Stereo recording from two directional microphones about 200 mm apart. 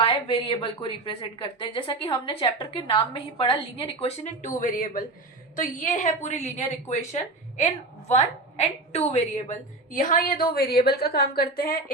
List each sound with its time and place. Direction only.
0.0 s a woman's voice: 25° left (ahead or behind); by 11.8 s 45° left (ahead or behind)